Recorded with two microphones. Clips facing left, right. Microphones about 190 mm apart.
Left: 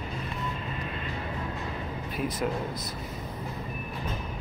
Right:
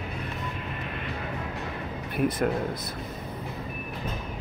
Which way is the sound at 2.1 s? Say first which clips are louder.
Right 5 dB; 60° right (ahead or behind).